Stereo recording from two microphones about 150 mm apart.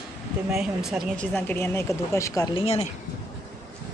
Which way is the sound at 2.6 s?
40° left (ahead or behind).